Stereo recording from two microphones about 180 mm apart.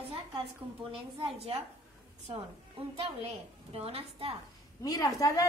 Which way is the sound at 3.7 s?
35° right (ahead or behind).